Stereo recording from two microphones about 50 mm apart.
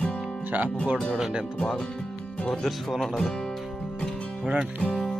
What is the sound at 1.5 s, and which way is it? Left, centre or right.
Speech, centre.